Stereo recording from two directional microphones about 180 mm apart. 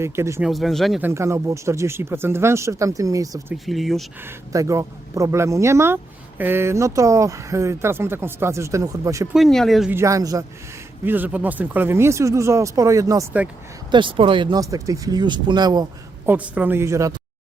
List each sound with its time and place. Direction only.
0.0 s speech: 15° right (ahead or behind)
0.4 s speech: centre (ahead or behind)
1.0 s speech: 15° right (ahead or behind)
3.5 s speech: centre (ahead or behind)
4.2 s speech: 15° right (ahead or behind)
9.3 s speech: centre (ahead or behind)
9.9 s speech: 15° right (ahead or behind)
16.2 s speech: 10° right (ahead or behind)